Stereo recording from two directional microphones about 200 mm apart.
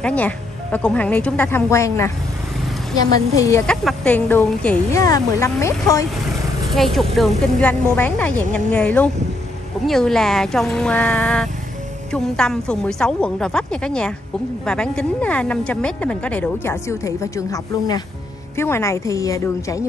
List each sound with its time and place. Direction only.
0.0 s speech: 5° left (ahead or behind)
3.6 s speech: 5° left (ahead or behind)
6.7 s a woman's voice: centre (ahead or behind)